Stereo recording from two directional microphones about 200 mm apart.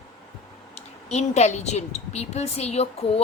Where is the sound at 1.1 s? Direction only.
35° left (ahead or behind).